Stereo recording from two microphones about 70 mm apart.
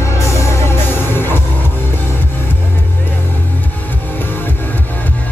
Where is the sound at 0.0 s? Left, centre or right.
Left.